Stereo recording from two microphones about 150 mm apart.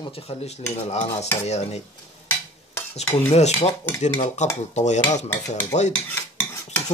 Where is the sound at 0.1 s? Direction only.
40° left (ahead or behind).